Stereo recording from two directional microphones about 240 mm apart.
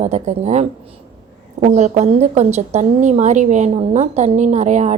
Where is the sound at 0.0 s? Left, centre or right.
Right.